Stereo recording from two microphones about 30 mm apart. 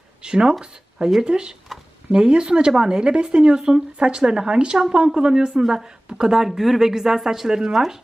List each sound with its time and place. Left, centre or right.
0.2 s speech: right
6.3 s speech: centre